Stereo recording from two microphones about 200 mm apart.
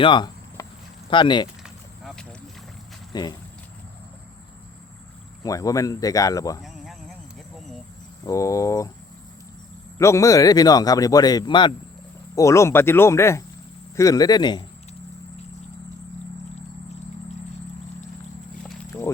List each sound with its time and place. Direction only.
0.0 s a sound: 25° left (ahead or behind)
1.1 s speech: 25° left (ahead or behind)
1.6 s a sound: centre (ahead or behind)
3.1 s speech: 20° left (ahead or behind)
5.4 s speech: 15° left (ahead or behind)
6.6 s insect: centre (ahead or behind)
8.2 s speech: 15° left (ahead or behind)
10.0 s speech: 15° left (ahead or behind)
18.9 s music: 15° left (ahead or behind)